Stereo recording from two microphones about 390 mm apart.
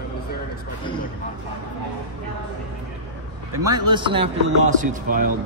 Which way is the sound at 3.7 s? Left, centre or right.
Centre.